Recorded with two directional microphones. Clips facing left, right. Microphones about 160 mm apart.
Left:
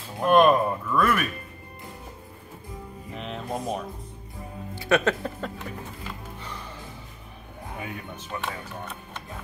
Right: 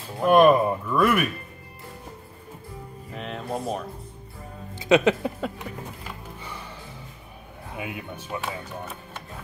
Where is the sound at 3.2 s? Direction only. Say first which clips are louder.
Right 1 dB; centre (ahead or behind).